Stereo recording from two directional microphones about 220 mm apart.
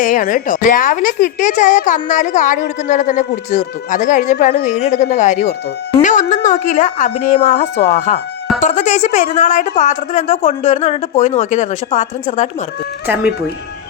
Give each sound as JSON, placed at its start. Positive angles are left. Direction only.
{"t": 0.0, "sound": "a woman's voice", "side_deg": 40}
{"t": 8.6, "sound": "a woman's voice", "side_deg": 35}